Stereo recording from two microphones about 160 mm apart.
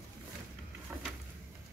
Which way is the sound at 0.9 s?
20° right (ahead or behind).